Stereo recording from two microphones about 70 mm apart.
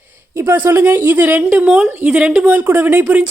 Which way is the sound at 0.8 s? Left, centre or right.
Right.